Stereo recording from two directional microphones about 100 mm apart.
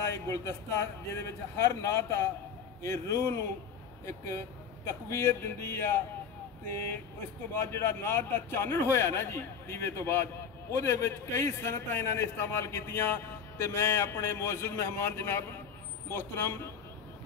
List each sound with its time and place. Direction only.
0.1 s a man's voice: 30° left (ahead or behind)
7.5 s a man's voice: 25° left (ahead or behind)